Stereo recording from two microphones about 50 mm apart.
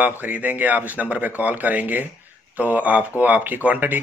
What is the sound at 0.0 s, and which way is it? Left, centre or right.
Speech, right.